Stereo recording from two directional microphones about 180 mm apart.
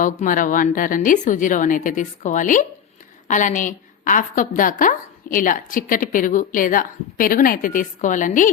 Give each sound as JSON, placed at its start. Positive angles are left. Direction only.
{"t": 0.0, "sound": "a woman's voice", "side_deg": 45}